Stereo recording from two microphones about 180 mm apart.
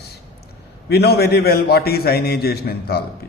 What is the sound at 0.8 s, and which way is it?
A man's voice, 65° left (ahead or behind).